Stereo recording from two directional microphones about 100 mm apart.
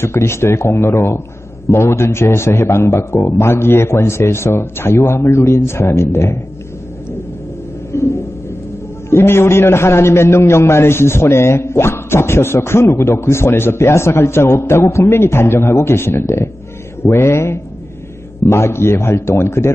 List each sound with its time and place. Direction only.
0.0 s a man's voice: 25° left (ahead or behind)
7.9 s a sound: 25° left (ahead or behind)
9.1 s a man's voice: 25° left (ahead or behind)